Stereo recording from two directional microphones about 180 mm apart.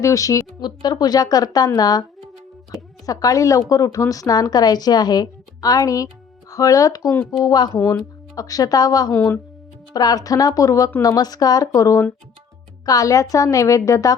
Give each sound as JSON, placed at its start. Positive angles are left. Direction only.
{"t": 0.0, "sound": "a woman's voice", "side_deg": 20}
{"t": 3.1, "sound": "a woman's voice", "side_deg": 20}